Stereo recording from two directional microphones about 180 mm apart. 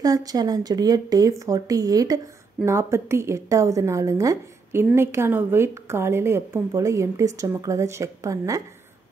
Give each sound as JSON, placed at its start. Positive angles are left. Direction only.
{"t": 0.0, "sound": "a woman's voice", "side_deg": -20}